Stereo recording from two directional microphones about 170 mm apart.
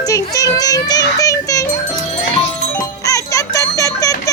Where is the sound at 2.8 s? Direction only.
20° left (ahead or behind).